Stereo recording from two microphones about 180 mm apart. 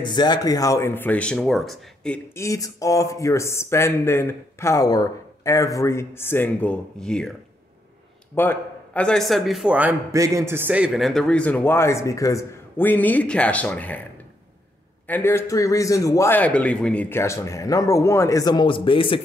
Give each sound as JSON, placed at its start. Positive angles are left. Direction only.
{"t": 0.0, "sound": "speech", "side_deg": 25}
{"t": 8.4, "sound": "speech", "side_deg": 10}
{"t": 15.0, "sound": "speech", "side_deg": 10}